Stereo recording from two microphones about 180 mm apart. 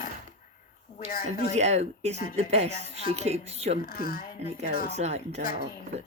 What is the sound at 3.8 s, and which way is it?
Speech, 55° left (ahead or behind).